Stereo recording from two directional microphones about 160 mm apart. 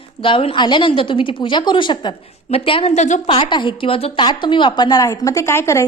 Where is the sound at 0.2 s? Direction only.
35° left (ahead or behind).